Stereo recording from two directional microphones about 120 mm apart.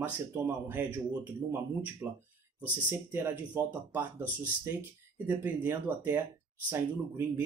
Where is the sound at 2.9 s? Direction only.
20° right (ahead or behind).